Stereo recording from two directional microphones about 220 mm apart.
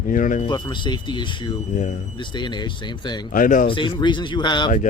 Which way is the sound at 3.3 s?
35° left (ahead or behind).